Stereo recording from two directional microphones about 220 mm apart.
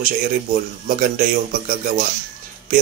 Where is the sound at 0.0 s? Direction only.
40° right (ahead or behind).